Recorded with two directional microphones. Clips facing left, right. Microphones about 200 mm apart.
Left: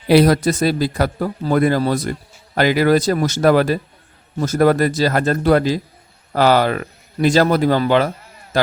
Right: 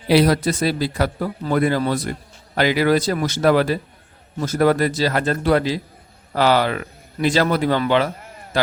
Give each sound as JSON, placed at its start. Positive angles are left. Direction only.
{"t": 0.1, "sound": "a man's voice", "side_deg": 45}